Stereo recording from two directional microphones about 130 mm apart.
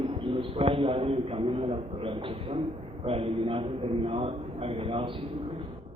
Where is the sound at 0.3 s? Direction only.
45° right (ahead or behind).